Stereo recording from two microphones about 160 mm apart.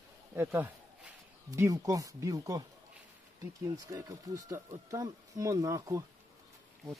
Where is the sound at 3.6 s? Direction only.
25° right (ahead or behind).